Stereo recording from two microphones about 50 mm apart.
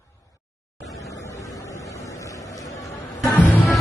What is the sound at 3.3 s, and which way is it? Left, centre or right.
Music, left.